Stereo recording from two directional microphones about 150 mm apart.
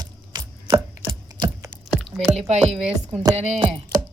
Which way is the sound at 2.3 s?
45° right (ahead or behind).